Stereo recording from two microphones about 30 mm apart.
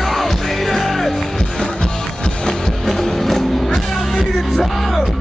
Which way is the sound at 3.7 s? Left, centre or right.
Centre.